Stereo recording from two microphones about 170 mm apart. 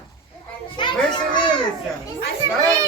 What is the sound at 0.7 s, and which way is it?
Speech, 30° left (ahead or behind).